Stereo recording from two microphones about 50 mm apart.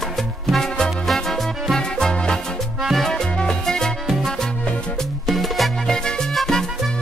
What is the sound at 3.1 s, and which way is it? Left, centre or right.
Music, centre.